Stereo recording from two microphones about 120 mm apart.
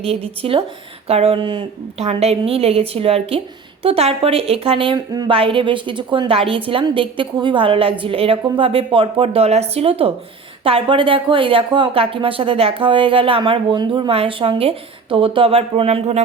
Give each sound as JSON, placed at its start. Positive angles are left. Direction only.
{"t": 0.0, "sound": "a woman's voice", "side_deg": -55}
{"t": 2.0, "sound": "a woman's voice", "side_deg": -60}